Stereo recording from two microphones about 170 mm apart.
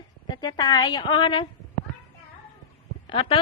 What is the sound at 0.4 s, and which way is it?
A woman's voice, 25° left (ahead or behind).